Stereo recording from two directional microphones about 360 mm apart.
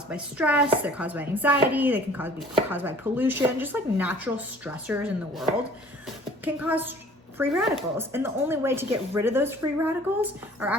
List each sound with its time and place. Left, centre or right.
0.1 s chopping: centre
7.3 s speech: centre
10.2 s chopping: centre